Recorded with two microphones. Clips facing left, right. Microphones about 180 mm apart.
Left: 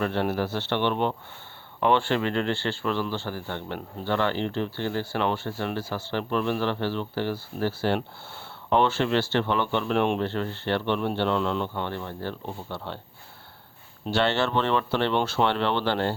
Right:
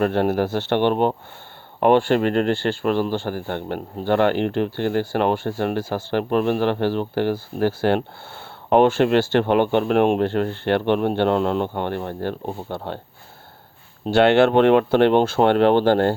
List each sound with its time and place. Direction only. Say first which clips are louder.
0.0 s speech: right 7 dB; 50° right (ahead or behind)
14.1 s speech: right 9 dB; 55° right (ahead or behind)